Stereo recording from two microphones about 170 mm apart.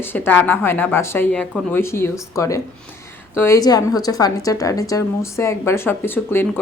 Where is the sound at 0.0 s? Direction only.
10° left (ahead or behind).